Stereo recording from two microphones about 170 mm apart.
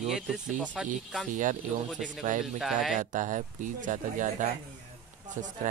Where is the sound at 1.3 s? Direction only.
50° right (ahead or behind).